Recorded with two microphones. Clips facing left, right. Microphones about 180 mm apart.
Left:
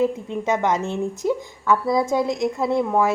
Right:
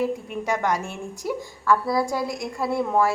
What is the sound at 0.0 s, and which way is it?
A woman's voice, 20° left (ahead or behind).